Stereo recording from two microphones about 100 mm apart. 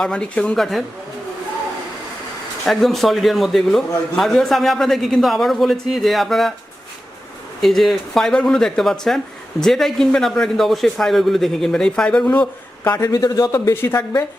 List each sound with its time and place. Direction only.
0.0 s speech: 10° left (ahead or behind)
2.6 s speech: centre (ahead or behind)
7.6 s speech: 5° left (ahead or behind)
12.9 s speech: 35° left (ahead or behind)
13.5 s speech: 25° left (ahead or behind)